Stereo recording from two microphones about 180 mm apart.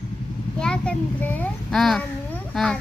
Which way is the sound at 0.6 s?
5° left (ahead or behind).